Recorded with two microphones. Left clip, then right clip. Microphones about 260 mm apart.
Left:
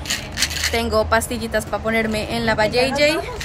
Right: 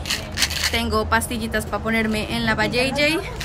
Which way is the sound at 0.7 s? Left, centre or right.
Centre.